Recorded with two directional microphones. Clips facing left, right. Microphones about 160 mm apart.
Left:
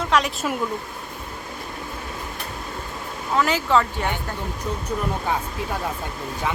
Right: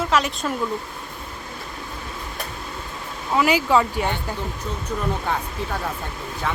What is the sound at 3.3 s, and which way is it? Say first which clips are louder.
Speech: right 2 dB; 10° right (ahead or behind).